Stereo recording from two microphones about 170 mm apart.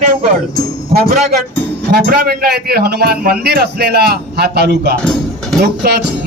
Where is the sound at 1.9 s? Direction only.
60° right (ahead or behind); by 4.9 s 80° right.